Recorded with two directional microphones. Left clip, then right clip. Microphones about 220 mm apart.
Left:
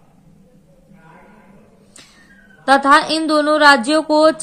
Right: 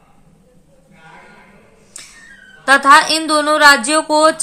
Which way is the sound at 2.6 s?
15° right (ahead or behind).